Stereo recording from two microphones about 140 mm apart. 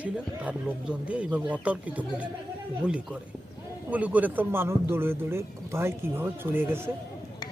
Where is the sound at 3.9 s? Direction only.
10° right (ahead or behind).